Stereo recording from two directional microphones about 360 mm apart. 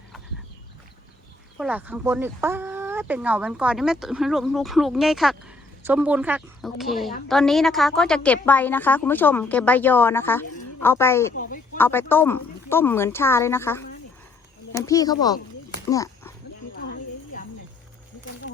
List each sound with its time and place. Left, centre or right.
1.5 s a woman's voice: centre
11.3 s a sound: left
11.8 s speech: centre
15.9 s dog: centre